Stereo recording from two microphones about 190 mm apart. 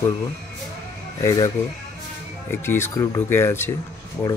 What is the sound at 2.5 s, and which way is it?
Speech, 10° left (ahead or behind).